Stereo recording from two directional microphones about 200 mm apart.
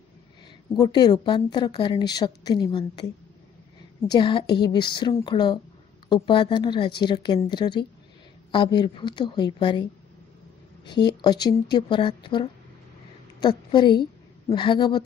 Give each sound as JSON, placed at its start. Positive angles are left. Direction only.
{"t": 0.7, "sound": "a woman's voice", "side_deg": 20}
{"t": 4.1, "sound": "a woman's voice", "side_deg": 25}
{"t": 11.1, "sound": "a woman's voice", "side_deg": 20}